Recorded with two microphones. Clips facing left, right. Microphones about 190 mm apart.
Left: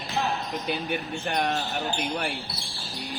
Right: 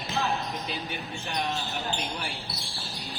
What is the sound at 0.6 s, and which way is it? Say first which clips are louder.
Speech: left 6 dB; 60° left (ahead or behind).